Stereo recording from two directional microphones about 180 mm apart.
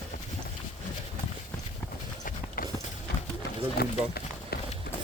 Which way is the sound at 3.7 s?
60° left (ahead or behind).